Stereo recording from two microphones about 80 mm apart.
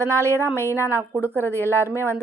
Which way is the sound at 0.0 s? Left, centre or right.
Right.